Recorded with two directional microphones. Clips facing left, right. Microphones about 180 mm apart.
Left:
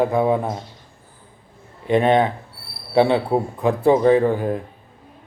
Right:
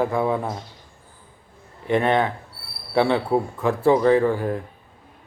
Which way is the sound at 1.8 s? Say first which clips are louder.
Left 3 dB; 20° left (ahead or behind).